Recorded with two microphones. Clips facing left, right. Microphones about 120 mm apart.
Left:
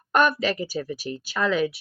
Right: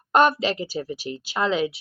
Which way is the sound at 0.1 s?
25° right (ahead or behind).